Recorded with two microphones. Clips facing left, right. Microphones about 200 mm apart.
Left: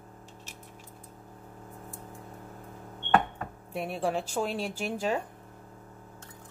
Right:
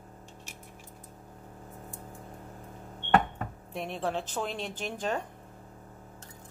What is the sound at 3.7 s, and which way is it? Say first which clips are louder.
Speech: left 2 dB; 5° left (ahead or behind).